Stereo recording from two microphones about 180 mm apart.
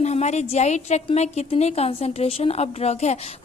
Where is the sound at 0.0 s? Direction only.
40° left (ahead or behind).